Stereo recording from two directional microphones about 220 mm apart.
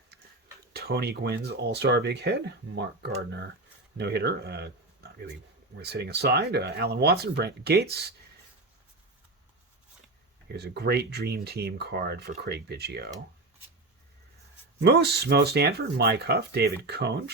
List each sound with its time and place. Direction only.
0.7 s speech: 45° right (ahead or behind)
10.5 s speech: 50° right (ahead or behind)
14.8 s speech: 50° right (ahead or behind)